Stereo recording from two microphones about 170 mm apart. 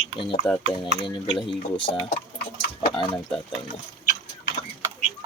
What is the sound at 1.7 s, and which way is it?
Speech, 30° left (ahead or behind).